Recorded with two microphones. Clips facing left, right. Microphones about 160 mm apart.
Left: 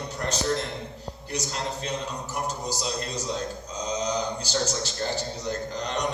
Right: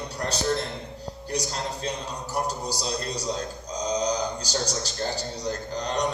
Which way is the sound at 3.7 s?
35° right (ahead or behind).